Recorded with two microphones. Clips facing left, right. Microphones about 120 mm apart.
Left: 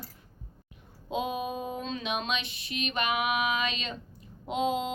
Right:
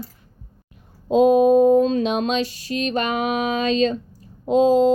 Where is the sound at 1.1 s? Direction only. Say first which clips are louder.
Right 18 dB; 40° right (ahead or behind).